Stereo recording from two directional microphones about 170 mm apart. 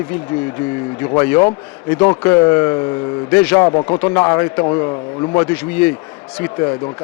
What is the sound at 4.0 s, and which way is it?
A man's voice, 10° left (ahead or behind).